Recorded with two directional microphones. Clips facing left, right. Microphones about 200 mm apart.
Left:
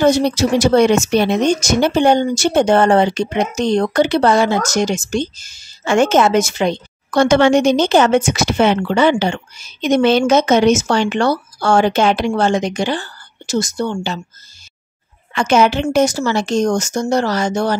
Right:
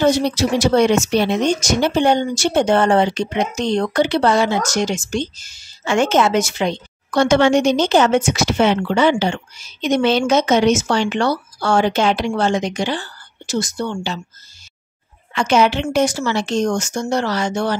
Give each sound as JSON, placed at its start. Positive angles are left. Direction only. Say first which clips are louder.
{"t": 0.3, "sound": "speech", "louder": "left 3 dB", "side_deg": 45}
{"t": 15.3, "sound": "speech", "louder": "left 2 dB", "side_deg": 50}